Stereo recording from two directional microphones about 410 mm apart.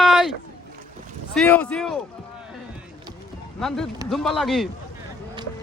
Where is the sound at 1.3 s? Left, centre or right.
Centre.